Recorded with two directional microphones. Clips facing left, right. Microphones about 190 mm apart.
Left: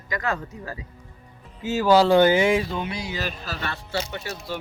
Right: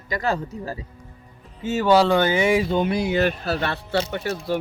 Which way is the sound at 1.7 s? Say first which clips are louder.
Even; centre (ahead or behind).